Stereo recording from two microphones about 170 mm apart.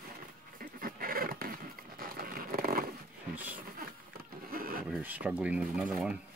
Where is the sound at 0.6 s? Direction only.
55° right (ahead or behind).